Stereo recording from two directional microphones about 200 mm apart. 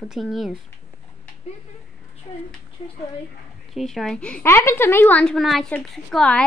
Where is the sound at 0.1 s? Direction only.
Centre (ahead or behind).